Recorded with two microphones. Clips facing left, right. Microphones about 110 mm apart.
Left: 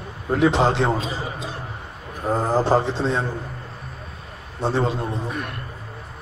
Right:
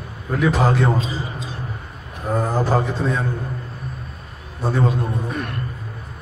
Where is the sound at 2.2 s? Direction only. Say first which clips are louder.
Left 1 dB; 25° left (ahead or behind).